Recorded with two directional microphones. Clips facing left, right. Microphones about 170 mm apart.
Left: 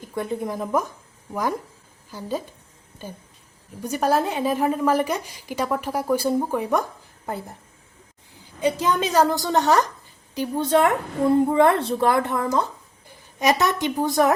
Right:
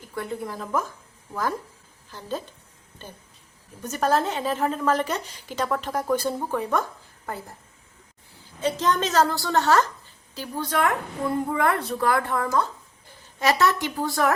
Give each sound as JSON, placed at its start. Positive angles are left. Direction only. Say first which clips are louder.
{"t": 0.0, "sound": "a woman's voice", "louder": "left 4 dB", "side_deg": 20}
{"t": 3.8, "sound": "a woman's voice", "louder": "left 2 dB", "side_deg": 10}
{"t": 8.6, "sound": "a woman's voice", "louder": "left 2 dB", "side_deg": 10}